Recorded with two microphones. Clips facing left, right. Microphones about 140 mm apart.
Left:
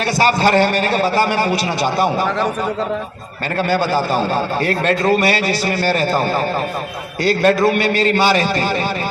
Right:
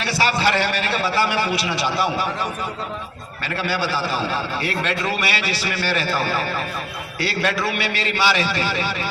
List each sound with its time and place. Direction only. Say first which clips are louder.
0.0 s a man's voice: left 5 dB; 45° left (ahead or behind)
3.6 s a man's voice: left 7 dB; 45° left (ahead or behind)